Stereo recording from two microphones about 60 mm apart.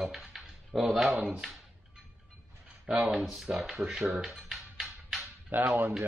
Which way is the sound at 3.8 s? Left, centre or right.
Centre.